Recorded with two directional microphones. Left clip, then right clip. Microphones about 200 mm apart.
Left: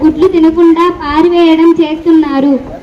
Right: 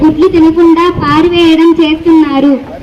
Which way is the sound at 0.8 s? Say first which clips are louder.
Right 1 dB; 50° right (ahead or behind).